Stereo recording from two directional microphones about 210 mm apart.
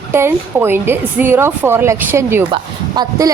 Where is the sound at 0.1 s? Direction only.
10° right (ahead or behind).